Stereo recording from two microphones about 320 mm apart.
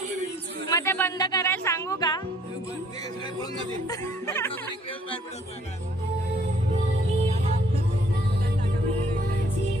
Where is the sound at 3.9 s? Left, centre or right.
Centre.